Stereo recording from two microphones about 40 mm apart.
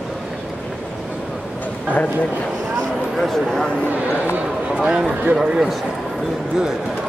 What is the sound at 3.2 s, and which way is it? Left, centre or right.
Speech, centre.